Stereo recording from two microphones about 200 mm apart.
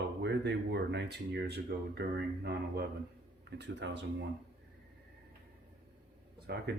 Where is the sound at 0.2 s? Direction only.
60° right (ahead or behind).